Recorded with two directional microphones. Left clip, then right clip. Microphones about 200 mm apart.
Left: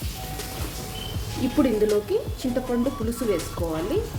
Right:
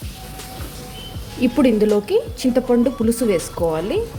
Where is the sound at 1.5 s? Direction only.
40° right (ahead or behind).